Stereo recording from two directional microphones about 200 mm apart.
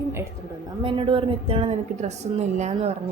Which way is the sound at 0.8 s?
25° right (ahead or behind).